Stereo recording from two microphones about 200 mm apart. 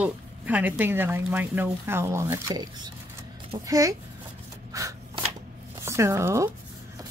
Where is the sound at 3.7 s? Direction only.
15° right (ahead or behind).